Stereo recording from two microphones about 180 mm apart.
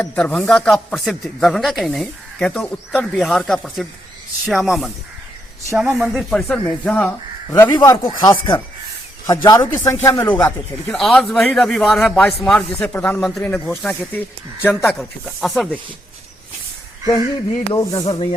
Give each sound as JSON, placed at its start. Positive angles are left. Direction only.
{"t": 0.0, "sound": "speech", "side_deg": 5}
{"t": 6.0, "sound": "speech", "side_deg": 0}
{"t": 7.7, "sound": "speech", "side_deg": 25}
{"t": 17.7, "sound": "speech", "side_deg": 20}